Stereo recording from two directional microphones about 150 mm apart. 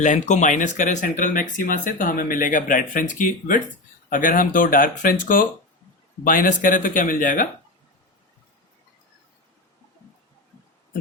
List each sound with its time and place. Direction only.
0.0 s speech: 55° left (ahead or behind)